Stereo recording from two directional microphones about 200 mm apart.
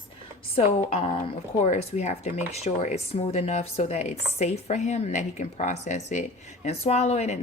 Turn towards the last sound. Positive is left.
turn(degrees=35)  # may be behind; listen again after turning